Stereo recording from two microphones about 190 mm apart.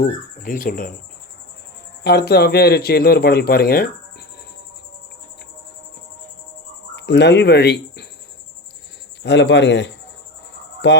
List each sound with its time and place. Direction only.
0.0 s speech: 45° left (ahead or behind)
2.0 s speech: 55° left (ahead or behind)
6.9 s speech: 65° left (ahead or behind)
9.2 s a man's voice: 65° left (ahead or behind)